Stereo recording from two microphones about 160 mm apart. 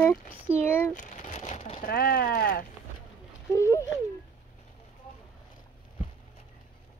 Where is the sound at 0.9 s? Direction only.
50° left (ahead or behind); by 2.6 s 70° left (ahead or behind).